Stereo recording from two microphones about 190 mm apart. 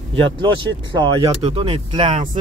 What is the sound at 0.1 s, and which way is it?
Speech, 30° right (ahead or behind).